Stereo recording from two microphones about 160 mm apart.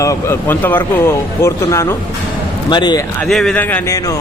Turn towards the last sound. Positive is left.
turn(degrees=10)  # may be behind; listen again after turning